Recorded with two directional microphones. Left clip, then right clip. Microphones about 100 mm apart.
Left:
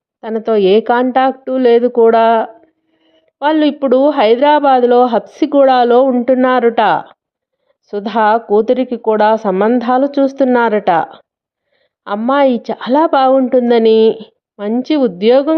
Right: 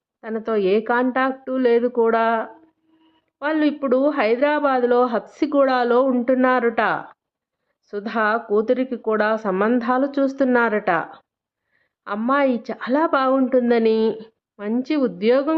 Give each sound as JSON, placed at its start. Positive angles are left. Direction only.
{"t": 0.2, "sound": "a woman's voice", "side_deg": 65}